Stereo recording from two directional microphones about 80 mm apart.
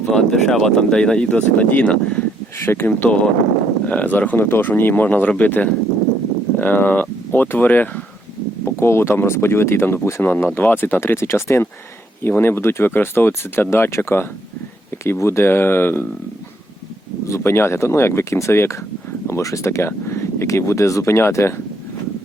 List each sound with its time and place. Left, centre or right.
0.1 s speech: centre
2.6 s speech: left
17.2 s speech: left